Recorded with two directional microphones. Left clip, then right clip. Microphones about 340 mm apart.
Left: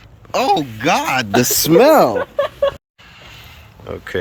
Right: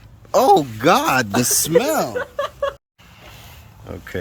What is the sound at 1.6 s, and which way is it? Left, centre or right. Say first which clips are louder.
Speech: left 10 dB; left.